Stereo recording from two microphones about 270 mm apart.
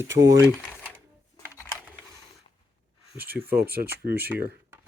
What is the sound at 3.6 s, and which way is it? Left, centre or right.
Speech, right.